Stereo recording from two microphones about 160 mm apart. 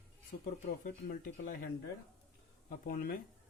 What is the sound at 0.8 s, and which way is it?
Speech, 60° left (ahead or behind).